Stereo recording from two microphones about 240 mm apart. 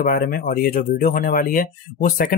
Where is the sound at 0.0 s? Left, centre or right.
Left.